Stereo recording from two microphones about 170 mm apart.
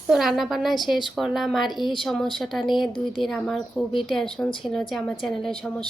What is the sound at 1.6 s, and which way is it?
Speech, 25° left (ahead or behind).